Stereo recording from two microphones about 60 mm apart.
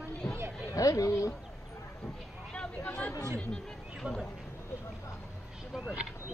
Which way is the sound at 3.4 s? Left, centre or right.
Centre.